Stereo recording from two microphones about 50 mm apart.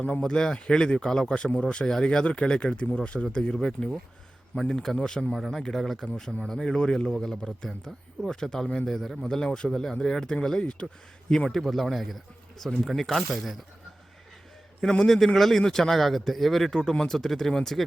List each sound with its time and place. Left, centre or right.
0.0 s a man's voice: centre
5.3 s a man's voice: centre
14.8 s a man's voice: centre